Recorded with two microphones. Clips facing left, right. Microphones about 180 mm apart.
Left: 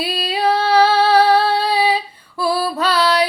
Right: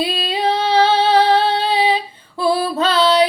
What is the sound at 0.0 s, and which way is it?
Female singing, 25° right (ahead or behind).